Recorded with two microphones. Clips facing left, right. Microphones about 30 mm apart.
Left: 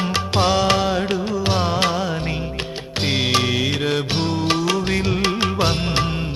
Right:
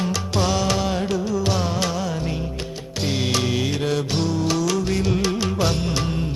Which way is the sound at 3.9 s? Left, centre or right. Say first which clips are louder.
Left 1 dB; left.